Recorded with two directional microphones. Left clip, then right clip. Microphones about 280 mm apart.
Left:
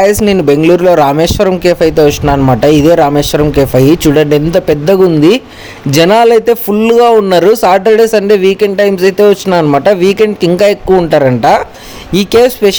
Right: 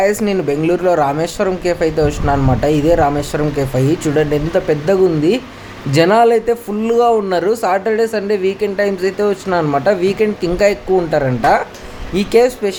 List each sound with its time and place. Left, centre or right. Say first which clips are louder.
0.0 s a man's voice: left 7 dB; left